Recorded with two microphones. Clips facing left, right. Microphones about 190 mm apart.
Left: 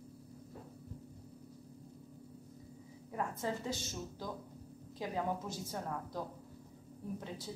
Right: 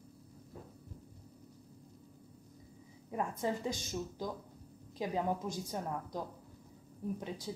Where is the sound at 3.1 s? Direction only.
15° right (ahead or behind).